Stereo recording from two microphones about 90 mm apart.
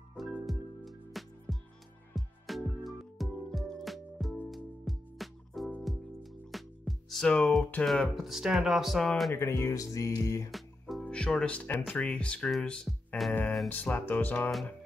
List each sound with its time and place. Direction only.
0.2 s music: centre (ahead or behind)
6.5 s speech: centre (ahead or behind)
9.3 s speech: 30° left (ahead or behind)
10.5 s music: centre (ahead or behind)
11.1 s speech: 10° left (ahead or behind)
13.7 s speech: 20° left (ahead or behind)